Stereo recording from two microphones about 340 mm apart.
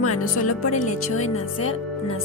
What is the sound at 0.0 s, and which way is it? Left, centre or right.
Speech, left.